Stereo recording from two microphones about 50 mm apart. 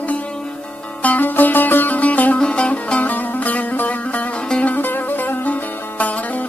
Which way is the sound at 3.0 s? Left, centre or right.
Left.